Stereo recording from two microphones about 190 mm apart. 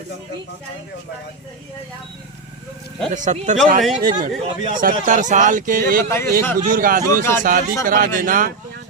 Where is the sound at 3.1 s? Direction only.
40° right (ahead or behind).